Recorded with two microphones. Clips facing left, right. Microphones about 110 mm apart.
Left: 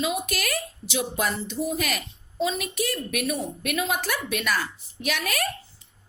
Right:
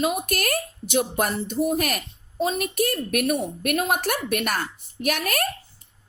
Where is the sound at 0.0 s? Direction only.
50° right (ahead or behind).